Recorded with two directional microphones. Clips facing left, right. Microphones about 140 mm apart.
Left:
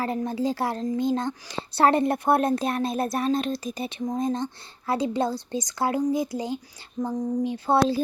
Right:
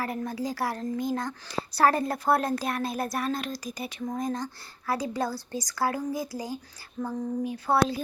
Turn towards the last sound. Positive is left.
turn(degrees=25)  # may be behind; listen again after turning